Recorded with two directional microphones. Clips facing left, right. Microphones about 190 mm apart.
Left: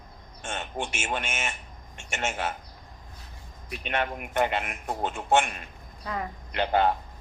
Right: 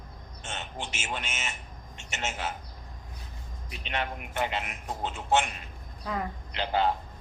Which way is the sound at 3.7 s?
55° left (ahead or behind).